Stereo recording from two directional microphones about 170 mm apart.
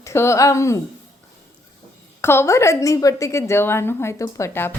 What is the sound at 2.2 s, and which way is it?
A woman's voice, 15° left (ahead or behind).